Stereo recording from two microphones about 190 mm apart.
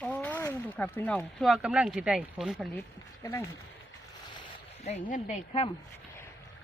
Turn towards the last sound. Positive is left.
turn(degrees=35)  # may be behind; listen again after turning